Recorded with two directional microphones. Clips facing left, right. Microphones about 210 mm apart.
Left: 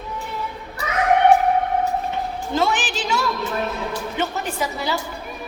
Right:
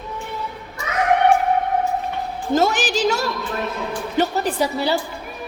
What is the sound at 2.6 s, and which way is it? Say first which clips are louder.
A woman's voice: right 3 dB; 40° right (ahead or behind).